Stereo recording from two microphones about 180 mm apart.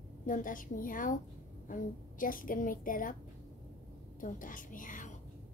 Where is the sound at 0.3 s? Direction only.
45° left (ahead or behind).